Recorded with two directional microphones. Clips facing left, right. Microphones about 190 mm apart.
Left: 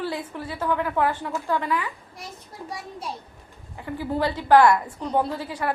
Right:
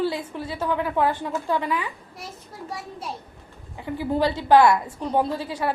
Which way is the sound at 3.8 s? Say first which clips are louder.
Right 2 dB; 15° right (ahead or behind).